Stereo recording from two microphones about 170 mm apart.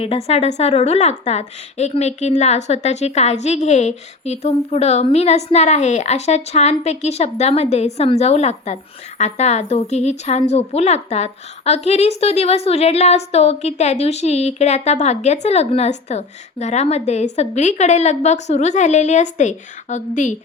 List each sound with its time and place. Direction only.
0.0 s a woman's voice: 35° left (ahead or behind)